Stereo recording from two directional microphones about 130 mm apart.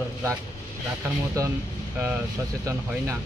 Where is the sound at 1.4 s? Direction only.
25° right (ahead or behind).